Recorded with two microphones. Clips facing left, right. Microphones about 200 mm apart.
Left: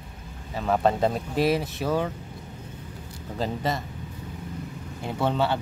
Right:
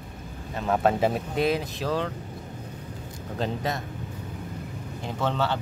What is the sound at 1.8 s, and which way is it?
Speech, 10° left (ahead or behind).